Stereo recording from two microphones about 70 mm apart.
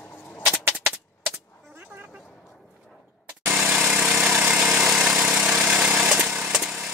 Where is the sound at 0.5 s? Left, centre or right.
Right.